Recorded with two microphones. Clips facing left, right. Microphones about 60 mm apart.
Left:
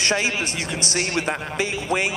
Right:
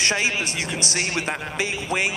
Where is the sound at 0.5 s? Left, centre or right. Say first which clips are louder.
Left 1 dB; right.